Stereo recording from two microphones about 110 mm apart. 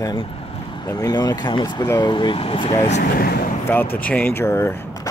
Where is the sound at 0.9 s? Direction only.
35° left (ahead or behind); by 3.0 s 75° left (ahead or behind).